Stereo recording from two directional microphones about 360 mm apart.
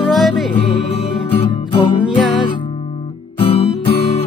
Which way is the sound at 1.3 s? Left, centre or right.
Centre.